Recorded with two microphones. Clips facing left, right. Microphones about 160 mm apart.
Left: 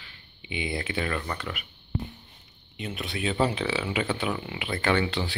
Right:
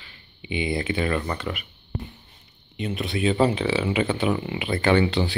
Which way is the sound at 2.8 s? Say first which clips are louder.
Right 7 dB; centre (ahead or behind).